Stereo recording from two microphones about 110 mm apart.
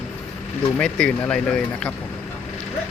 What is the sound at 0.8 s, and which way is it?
Speech, 10° left (ahead or behind).